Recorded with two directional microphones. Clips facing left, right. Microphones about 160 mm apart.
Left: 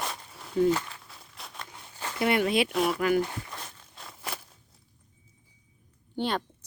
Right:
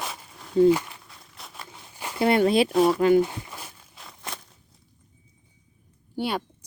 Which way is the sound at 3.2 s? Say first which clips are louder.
Right 5 dB; 15° right (ahead or behind).